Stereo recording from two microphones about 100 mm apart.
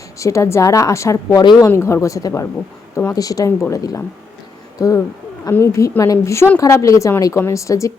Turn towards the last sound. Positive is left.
turn(degrees=30)  # may be behind; listen again after turning